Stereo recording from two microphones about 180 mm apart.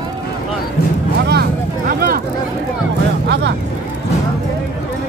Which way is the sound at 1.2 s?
65° right (ahead or behind).